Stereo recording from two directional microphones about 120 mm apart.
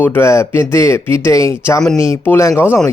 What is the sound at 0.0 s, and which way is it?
A man's voice, 20° left (ahead or behind).